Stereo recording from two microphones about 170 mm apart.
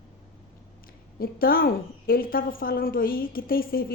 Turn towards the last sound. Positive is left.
turn(degrees=60)  # may be behind; listen again after turning